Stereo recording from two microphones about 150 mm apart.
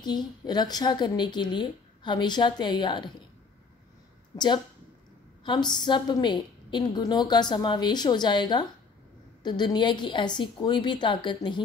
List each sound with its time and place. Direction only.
0.0 s a woman's voice: 30° left (ahead or behind)
4.3 s a woman's voice: 25° left (ahead or behind)